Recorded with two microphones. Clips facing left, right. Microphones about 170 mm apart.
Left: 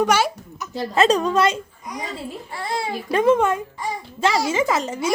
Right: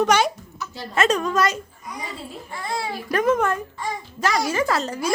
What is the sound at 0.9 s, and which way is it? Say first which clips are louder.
Speech: left 3 dB; 30° left (ahead or behind).